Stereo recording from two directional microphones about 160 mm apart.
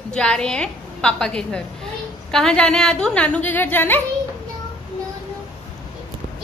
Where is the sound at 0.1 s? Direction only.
5° left (ahead or behind).